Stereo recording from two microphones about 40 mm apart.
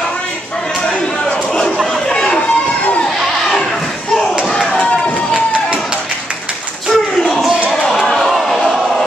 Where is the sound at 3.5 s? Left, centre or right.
Centre.